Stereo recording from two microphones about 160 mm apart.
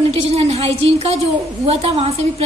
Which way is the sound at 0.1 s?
40° right (ahead or behind).